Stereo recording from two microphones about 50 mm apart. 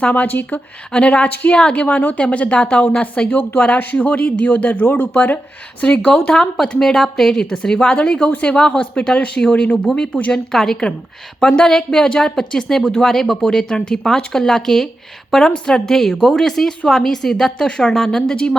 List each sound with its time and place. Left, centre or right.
0.0 s speech: left
0.9 s a woman's voice: left
3.0 s a woman's voice: left
6.3 s a woman's voice: centre
10.3 s speech: centre